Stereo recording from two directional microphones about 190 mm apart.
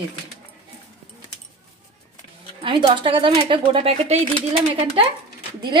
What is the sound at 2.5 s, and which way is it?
Speech, 25° right (ahead or behind).